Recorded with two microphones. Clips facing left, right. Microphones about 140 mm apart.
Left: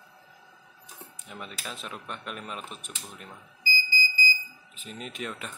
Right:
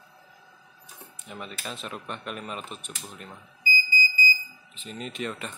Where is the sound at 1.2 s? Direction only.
5° right (ahead or behind).